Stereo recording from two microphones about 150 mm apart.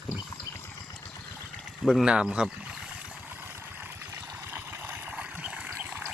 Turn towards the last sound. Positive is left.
turn(degrees=-10)  # may be behind; listen again after turning